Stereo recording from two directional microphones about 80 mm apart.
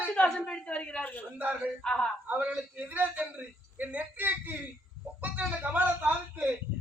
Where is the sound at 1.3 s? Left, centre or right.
Right.